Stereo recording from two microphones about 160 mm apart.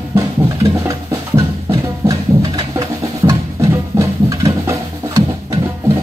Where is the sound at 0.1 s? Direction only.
20° right (ahead or behind).